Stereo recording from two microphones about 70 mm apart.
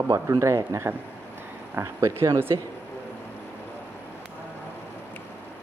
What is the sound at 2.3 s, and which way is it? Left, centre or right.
Speech, right.